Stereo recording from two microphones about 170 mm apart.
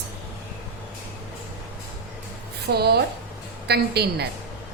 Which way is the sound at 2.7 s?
70° right (ahead or behind).